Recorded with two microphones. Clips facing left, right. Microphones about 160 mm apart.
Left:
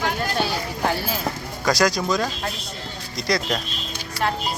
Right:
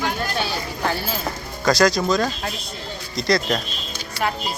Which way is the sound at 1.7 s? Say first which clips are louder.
Right 3 dB; 15° left (ahead or behind).